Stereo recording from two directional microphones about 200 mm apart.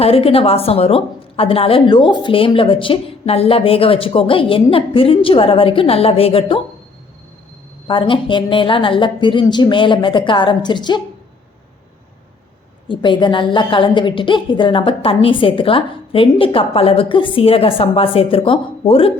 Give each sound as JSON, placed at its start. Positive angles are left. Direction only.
{"t": 0.0, "sound": "a woman's voice", "side_deg": 30}
{"t": 7.9, "sound": "a woman's voice", "side_deg": 25}
{"t": 12.9, "sound": "a woman's voice", "side_deg": 25}